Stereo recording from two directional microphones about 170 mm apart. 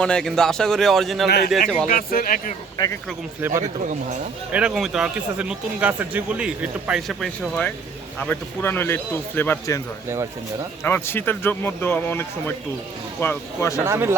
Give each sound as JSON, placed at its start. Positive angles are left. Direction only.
{"t": 0.0, "sound": "speech", "side_deg": 5}
{"t": 1.9, "sound": "speech", "side_deg": 55}
{"t": 2.7, "sound": "speech", "side_deg": 20}
{"t": 3.4, "sound": "speech", "side_deg": -10}
{"t": 10.8, "sound": "speech", "side_deg": 15}
{"t": 13.8, "sound": "speech", "side_deg": -15}